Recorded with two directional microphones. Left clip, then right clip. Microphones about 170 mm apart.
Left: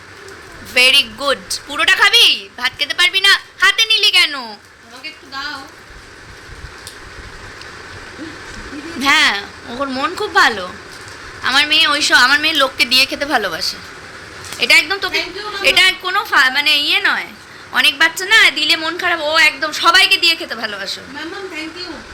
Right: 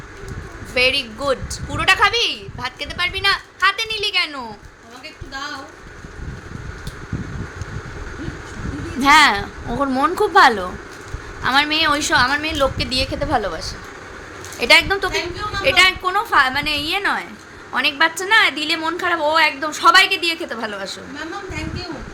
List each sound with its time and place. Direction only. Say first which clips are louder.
0.7 s a woman's voice: left 6 dB; centre (ahead or behind)
9.0 s a woman's voice: right 1 dB; 25° right (ahead or behind)
12.1 s a woman's voice: left 6 dB; 5° right (ahead or behind)
14.6 s a woman's voice: left 1 dB; 10° right (ahead or behind)
14.8 s a woman's voice: left 1 dB; 20° right (ahead or behind)
15.6 s a woman's voice: left 2 dB; 10° right (ahead or behind)